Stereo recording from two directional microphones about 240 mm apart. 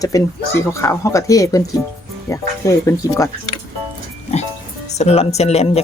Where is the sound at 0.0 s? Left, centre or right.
Centre.